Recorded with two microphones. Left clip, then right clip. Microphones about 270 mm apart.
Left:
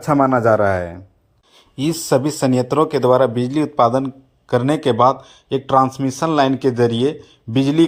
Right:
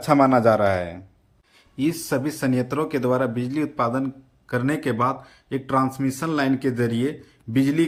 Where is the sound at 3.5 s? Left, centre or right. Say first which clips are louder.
Left 8 dB; left.